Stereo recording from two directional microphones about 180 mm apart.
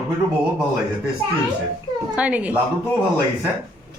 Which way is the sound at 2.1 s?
5° right (ahead or behind).